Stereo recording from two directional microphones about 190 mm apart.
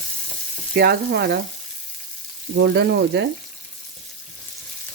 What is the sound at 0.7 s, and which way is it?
Speech, 60° right (ahead or behind).